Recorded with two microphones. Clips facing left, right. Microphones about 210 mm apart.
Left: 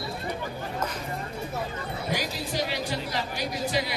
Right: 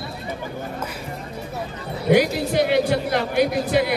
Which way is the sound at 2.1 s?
60° right (ahead or behind).